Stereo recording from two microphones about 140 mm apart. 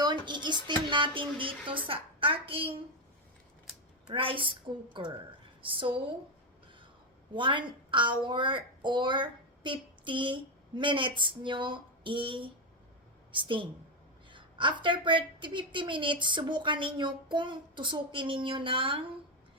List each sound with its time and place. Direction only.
0.0 s a sound: 30° right (ahead or behind)
4.0 s a woman's voice: 40° right (ahead or behind)
7.3 s a woman's voice: 35° right (ahead or behind)